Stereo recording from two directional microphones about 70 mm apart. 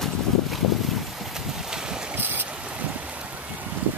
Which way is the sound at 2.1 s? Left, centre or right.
Right.